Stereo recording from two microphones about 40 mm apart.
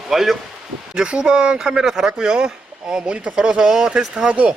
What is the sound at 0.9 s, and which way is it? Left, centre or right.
Speech, centre.